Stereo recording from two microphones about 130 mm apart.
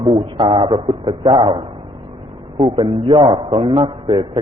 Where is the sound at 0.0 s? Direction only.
40° right (ahead or behind).